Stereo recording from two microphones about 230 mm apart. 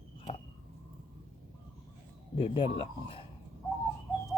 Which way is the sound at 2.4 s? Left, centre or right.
Left.